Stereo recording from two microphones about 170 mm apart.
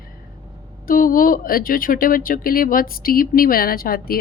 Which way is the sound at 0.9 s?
55° left (ahead or behind).